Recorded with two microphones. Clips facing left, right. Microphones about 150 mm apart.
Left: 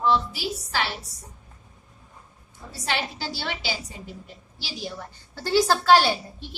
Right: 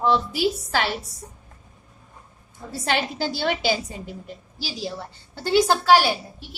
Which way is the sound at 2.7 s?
50° right (ahead or behind).